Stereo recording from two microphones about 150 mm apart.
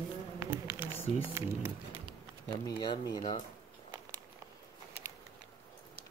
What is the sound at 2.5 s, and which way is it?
Speech, 30° left (ahead or behind).